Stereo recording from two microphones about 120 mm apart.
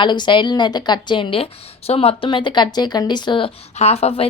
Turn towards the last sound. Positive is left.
turn(degrees=60)  # may be behind; listen again after turning